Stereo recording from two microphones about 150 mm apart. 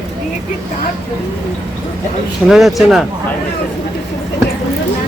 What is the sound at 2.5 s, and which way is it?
Speech, centre (ahead or behind).